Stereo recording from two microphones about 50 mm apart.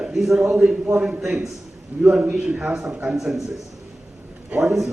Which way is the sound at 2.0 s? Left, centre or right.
Centre.